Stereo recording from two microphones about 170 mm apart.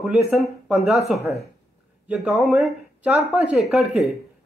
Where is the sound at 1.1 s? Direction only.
40° left (ahead or behind).